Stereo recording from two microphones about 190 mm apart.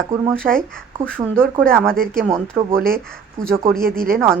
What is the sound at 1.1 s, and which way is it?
Speech, 10° right (ahead or behind).